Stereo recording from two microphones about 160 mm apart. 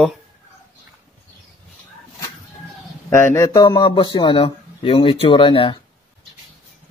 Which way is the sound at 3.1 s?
15° left (ahead or behind).